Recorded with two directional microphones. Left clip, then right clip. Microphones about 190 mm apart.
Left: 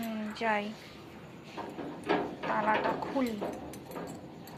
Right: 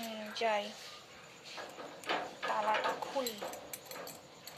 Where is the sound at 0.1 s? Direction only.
40° right (ahead or behind).